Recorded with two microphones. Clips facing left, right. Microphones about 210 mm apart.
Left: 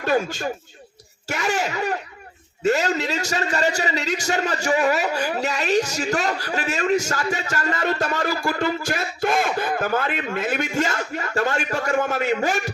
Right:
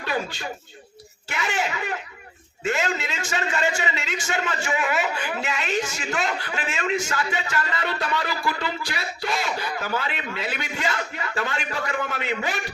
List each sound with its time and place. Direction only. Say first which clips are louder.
0.0 s a man's voice: left 7 dB; 45° left (ahead or behind)